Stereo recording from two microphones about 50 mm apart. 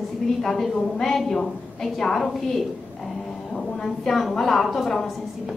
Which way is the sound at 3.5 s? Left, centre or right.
Centre.